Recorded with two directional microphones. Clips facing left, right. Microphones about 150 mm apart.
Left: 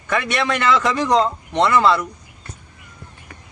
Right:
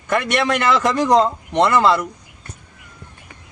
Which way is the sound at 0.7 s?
5° right (ahead or behind).